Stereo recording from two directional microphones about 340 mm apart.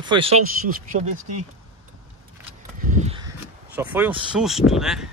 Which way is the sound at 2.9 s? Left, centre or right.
Centre.